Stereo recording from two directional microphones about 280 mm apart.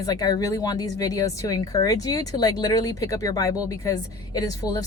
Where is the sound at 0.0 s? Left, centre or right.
Centre.